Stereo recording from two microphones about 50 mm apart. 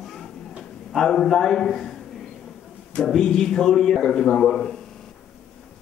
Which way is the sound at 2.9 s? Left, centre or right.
Centre.